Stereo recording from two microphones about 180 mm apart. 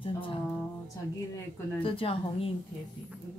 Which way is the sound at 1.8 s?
30° left (ahead or behind).